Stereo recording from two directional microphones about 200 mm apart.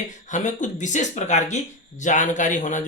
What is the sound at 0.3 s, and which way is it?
Speech, 35° left (ahead or behind).